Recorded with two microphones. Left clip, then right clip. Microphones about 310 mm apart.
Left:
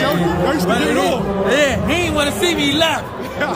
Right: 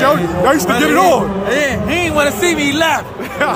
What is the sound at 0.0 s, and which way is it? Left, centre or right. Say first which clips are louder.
Speech: right 5 dB; centre.